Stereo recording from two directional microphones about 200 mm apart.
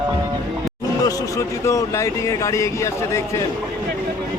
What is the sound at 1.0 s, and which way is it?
Speech, 15° left (ahead or behind).